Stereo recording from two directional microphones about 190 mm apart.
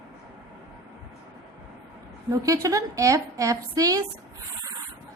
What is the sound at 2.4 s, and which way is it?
A woman's voice, 15° right (ahead or behind).